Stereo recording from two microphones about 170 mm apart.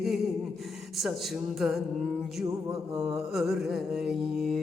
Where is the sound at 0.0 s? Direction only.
Centre (ahead or behind).